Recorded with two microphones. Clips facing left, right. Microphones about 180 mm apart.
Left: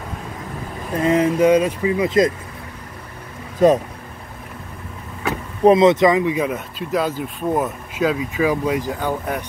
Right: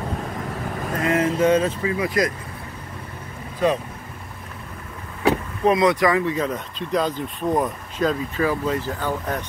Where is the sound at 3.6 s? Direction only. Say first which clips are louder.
Left 7 dB; 45° left (ahead or behind).